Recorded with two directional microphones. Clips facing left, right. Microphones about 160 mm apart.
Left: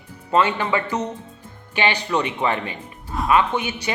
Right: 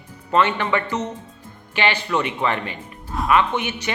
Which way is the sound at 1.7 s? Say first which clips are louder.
Even; 15° left (ahead or behind).